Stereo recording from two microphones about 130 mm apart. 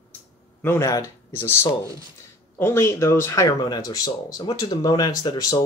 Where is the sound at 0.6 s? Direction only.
20° left (ahead or behind).